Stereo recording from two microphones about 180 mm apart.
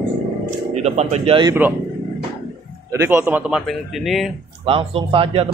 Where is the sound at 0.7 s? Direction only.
40° right (ahead or behind).